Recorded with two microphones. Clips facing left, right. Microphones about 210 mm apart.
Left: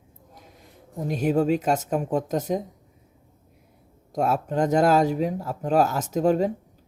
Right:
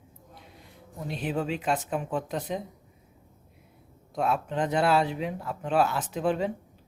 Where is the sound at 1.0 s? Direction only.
45° left (ahead or behind).